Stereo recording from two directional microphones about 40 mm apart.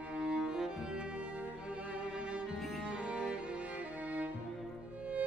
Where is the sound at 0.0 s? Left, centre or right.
Right.